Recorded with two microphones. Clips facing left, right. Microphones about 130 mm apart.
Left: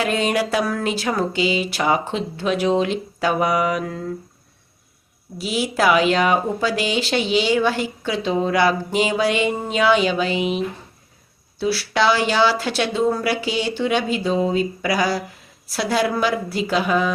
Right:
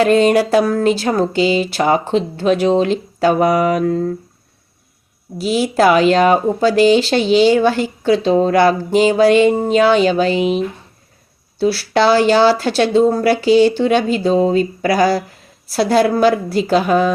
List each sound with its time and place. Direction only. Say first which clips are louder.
0.0 s speech: right 9 dB; 40° right (ahead or behind)
5.4 s speech: right 7 dB; 35° right (ahead or behind)
11.6 s speech: right 5 dB; 35° right (ahead or behind)